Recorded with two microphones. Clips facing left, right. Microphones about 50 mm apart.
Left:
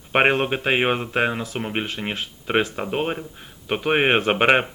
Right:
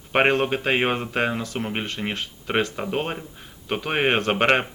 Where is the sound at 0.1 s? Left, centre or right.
Centre.